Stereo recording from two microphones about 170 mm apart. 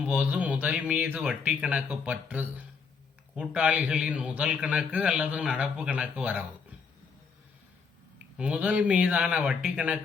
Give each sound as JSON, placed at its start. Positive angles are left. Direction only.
{"t": 0.0, "sound": "a man's voice", "side_deg": -5}
{"t": 8.4, "sound": "a man's voice", "side_deg": -10}